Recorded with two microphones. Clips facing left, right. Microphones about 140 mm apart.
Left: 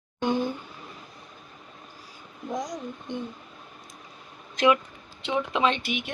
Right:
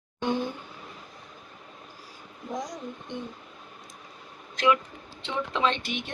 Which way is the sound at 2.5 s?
5° right (ahead or behind).